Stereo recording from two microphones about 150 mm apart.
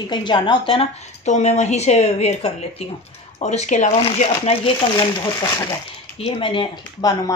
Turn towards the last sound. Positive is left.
turn(degrees=25)  # may be behind; listen again after turning